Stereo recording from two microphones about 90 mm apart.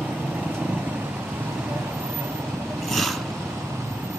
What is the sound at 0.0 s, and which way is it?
Vehicle, 20° right (ahead or behind).